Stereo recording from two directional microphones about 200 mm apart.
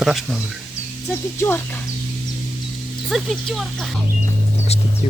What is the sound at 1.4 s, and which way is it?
Speech, 10° left (ahead or behind).